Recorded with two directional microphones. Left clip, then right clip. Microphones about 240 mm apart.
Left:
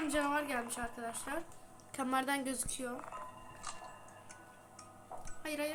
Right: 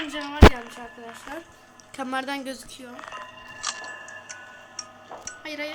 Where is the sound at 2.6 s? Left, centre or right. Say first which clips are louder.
Right 1 dB; centre.